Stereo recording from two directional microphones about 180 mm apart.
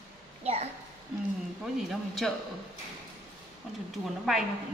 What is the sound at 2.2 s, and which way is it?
Speech, centre (ahead or behind).